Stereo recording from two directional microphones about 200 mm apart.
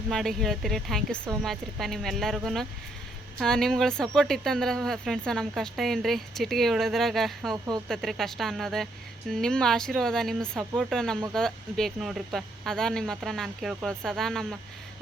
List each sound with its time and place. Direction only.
0.1 s speech: centre (ahead or behind)